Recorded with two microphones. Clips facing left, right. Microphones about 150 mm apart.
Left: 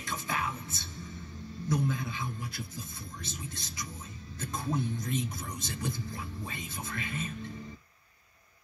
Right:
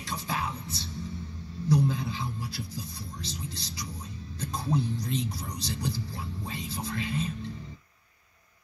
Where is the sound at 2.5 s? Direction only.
50° left (ahead or behind).